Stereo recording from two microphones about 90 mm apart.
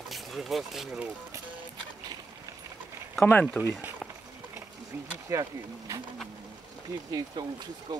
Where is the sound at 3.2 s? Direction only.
15° left (ahead or behind).